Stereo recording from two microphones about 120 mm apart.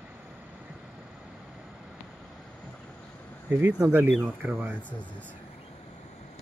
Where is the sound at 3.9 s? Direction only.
15° right (ahead or behind).